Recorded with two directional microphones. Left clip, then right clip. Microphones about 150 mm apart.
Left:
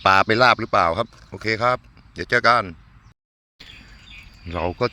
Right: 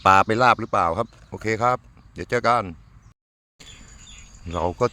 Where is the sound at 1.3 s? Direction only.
20° right (ahead or behind).